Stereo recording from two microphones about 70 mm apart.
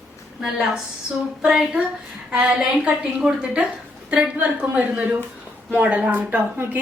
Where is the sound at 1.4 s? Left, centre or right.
Centre.